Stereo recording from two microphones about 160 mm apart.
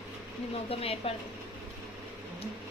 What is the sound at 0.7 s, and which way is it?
Speech, 40° left (ahead or behind).